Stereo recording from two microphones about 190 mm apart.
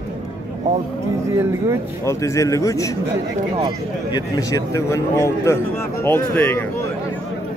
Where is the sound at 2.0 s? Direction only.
15° left (ahead or behind).